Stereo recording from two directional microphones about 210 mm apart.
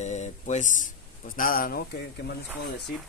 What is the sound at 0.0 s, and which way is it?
Speech, 35° left (ahead or behind).